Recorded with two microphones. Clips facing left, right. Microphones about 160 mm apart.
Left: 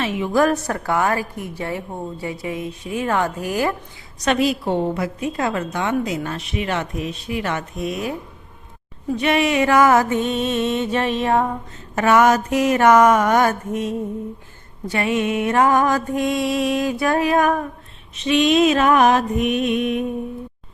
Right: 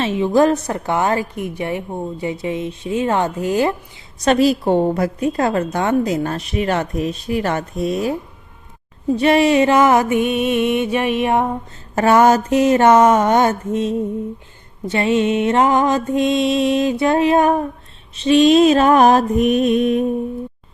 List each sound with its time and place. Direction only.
0.0 s a woman's voice: 30° right (ahead or behind)
4.2 s a woman's voice: 35° right (ahead or behind)
9.1 s music: 35° right (ahead or behind); by 11.5 s 15° right (ahead or behind)
11.9 s a woman's voice: 35° right (ahead or behind)